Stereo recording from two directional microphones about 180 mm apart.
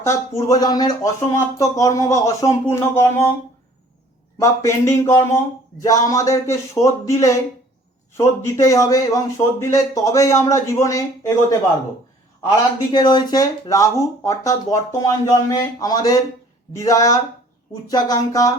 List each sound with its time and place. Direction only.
0.0 s speech: 15° left (ahead or behind)
4.4 s speech: 15° left (ahead or behind)
12.9 s speech: 25° left (ahead or behind)